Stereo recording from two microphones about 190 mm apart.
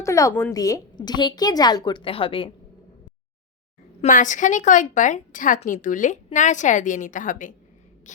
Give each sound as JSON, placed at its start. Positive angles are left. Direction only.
{"t": 0.0, "sound": "a woman's voice", "side_deg": 15}
{"t": 4.0, "sound": "a woman's voice", "side_deg": 40}